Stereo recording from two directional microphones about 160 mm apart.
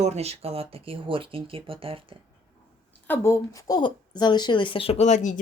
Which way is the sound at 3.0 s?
15° left (ahead or behind).